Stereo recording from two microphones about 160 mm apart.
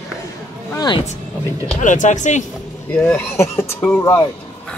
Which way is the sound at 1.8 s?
50° left (ahead or behind).